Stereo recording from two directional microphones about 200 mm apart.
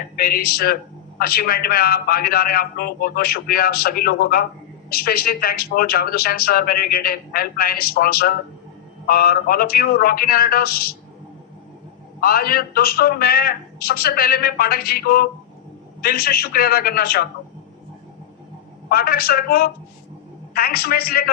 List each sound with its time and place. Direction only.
0.2 s speech: 50° left (ahead or behind)
12.2 s speech: 50° left (ahead or behind)
18.9 s speech: 50° left (ahead or behind)